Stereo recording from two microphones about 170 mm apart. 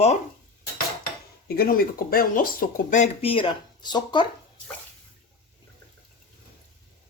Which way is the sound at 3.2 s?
30° left (ahead or behind).